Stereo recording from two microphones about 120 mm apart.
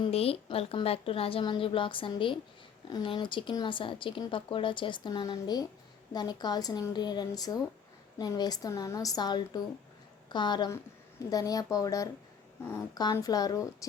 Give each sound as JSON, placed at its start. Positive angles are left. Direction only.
{"t": 0.1, "sound": "a woman's voice", "side_deg": 55}
{"t": 0.4, "sound": "a woman's voice", "side_deg": 45}